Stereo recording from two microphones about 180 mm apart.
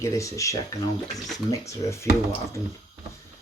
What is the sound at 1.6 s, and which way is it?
Speech, 15° left (ahead or behind).